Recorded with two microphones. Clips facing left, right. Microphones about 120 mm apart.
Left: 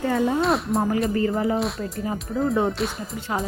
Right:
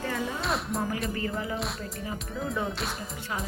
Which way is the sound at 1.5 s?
Centre (ahead or behind).